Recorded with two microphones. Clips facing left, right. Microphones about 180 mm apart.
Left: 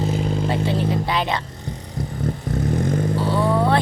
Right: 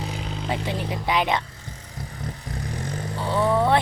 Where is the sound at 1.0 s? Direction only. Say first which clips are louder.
Even; 15° right (ahead or behind).